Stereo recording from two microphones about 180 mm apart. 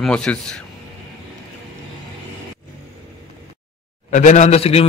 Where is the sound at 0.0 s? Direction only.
5° left (ahead or behind).